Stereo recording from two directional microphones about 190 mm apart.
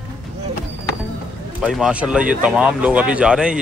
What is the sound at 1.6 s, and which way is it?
Speech, 5° right (ahead or behind).